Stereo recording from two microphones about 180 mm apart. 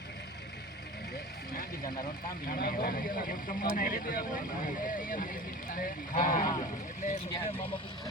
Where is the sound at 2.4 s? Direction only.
50° left (ahead or behind).